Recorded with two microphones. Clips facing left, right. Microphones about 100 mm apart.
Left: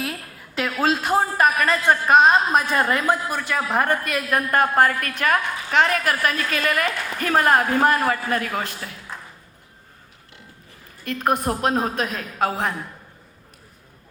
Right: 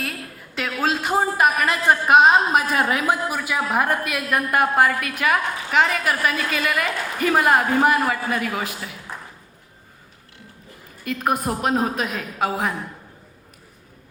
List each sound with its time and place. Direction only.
0.0 s a woman's voice: centre (ahead or behind)
11.0 s a woman's voice: 5° right (ahead or behind)